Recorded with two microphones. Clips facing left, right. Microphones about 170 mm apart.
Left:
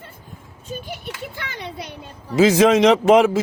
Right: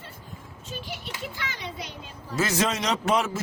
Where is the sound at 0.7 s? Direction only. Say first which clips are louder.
Left 6 dB; 55° left (ahead or behind).